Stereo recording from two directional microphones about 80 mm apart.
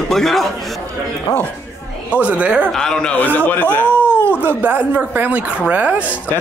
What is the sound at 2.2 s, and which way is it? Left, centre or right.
Speech, centre.